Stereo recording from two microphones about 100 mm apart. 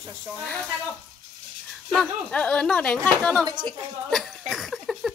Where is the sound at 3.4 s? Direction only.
50° right (ahead or behind).